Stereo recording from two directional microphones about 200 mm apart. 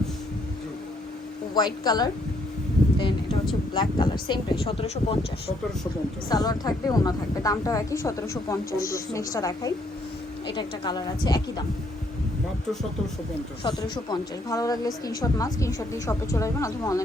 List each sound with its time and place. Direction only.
1.5 s speech: 20° left (ahead or behind)
3.8 s a woman's voice: 20° left (ahead or behind)
13.7 s a woman's voice: 20° left (ahead or behind)